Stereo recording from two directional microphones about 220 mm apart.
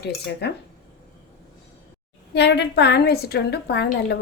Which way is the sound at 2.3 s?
50° left (ahead or behind).